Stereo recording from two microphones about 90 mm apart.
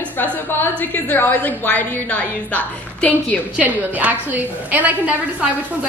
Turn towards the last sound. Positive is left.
turn(degrees=-15)  # may be behind; listen again after turning